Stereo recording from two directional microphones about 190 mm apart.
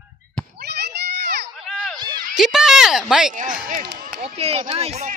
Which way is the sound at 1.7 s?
Centre (ahead or behind).